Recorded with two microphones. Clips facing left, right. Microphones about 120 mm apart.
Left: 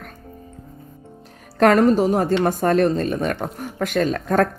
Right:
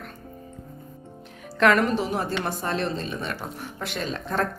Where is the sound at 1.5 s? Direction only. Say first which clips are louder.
Left 6 dB; 40° left (ahead or behind).